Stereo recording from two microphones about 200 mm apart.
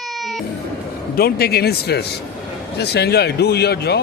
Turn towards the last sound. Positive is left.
turn(degrees=55)  # may be behind; listen again after turning